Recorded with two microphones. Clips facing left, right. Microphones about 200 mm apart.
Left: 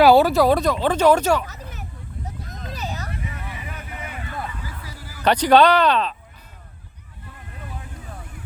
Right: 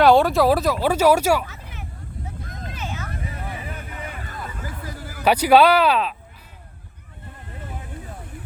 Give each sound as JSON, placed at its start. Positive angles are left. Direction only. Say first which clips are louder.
{"t": 0.0, "sound": "speech", "louder": "left 1 dB", "side_deg": 5}
{"t": 1.5, "sound": "a sound", "louder": "left 3 dB", "side_deg": 40}
{"t": 2.7, "sound": "vehicle", "louder": "left 2 dB", "side_deg": 40}
{"t": 3.1, "sound": "vehicle", "louder": "right 1 dB", "side_deg": -35}
{"t": 4.4, "sound": "a sound", "louder": "right 2 dB", "side_deg": -50}
{"t": 5.2, "sound": "speech", "louder": "even", "side_deg": -10}